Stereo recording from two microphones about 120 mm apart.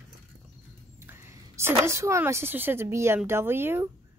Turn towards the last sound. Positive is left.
turn(degrees=-20)  # may be behind; listen again after turning